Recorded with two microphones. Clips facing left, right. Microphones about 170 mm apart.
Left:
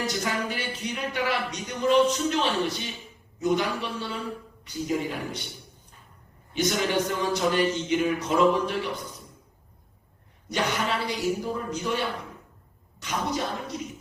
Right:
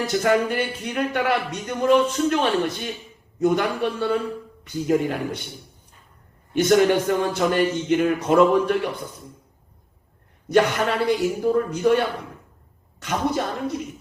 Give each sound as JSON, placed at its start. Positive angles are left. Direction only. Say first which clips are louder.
{"t": 0.1, "sound": "speech", "louder": "right 9 dB", "side_deg": -55}
{"t": 6.5, "sound": "speech", "louder": "right 9 dB", "side_deg": -55}
{"t": 10.5, "sound": "speech", "louder": "right 8 dB", "side_deg": -55}